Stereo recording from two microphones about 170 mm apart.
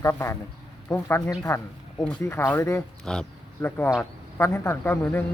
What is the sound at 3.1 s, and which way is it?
Speech, 5° left (ahead or behind).